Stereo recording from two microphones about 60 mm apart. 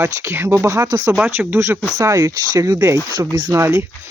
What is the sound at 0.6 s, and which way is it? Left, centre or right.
Speech, right.